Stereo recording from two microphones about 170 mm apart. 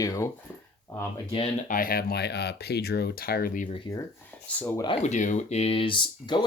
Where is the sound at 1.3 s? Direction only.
35° left (ahead or behind).